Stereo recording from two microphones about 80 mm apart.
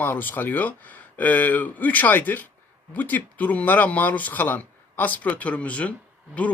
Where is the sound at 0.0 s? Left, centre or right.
Left.